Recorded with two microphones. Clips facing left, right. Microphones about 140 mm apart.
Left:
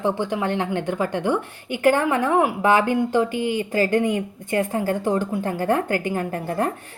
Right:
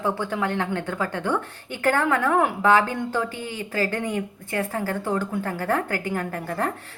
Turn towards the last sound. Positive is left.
turn(degrees=25)  # may be behind; listen again after turning